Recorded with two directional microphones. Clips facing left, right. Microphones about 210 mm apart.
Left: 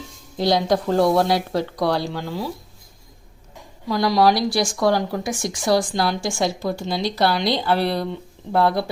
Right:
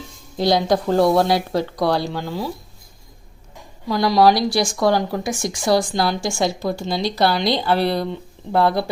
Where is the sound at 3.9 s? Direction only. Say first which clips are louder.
Right 2 dB; 30° right (ahead or behind).